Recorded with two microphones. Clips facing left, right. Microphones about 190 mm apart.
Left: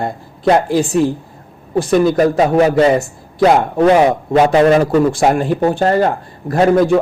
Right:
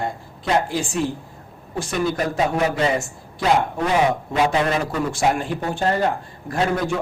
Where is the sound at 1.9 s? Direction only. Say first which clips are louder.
Left 11 dB; 55° left (ahead or behind).